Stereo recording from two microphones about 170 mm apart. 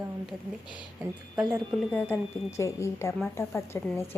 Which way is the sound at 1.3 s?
25° right (ahead or behind).